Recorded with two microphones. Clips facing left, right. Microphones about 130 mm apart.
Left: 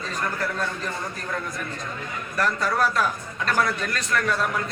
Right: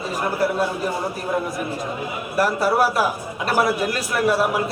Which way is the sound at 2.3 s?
10° right (ahead or behind).